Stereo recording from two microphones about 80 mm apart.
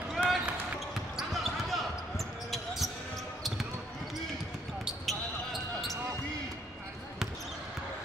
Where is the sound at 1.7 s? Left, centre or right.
Centre.